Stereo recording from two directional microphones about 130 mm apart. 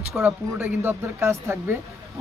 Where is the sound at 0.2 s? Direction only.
15° right (ahead or behind).